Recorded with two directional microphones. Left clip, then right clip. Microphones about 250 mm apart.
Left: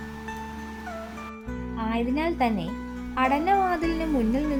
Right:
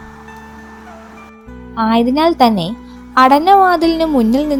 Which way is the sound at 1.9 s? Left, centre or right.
Right.